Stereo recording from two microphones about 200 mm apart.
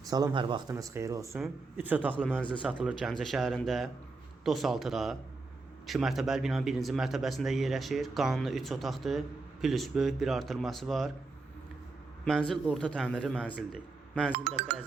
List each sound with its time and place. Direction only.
0.1 s speech: 20° right (ahead or behind); by 11.1 s centre (ahead or behind)
12.2 s speech: 5° left (ahead or behind)